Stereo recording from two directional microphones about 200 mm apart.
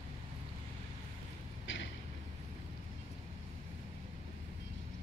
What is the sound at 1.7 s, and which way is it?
Vehicle, 70° left (ahead or behind).